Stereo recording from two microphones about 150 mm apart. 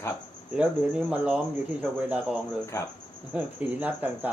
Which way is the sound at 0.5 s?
5° right (ahead or behind).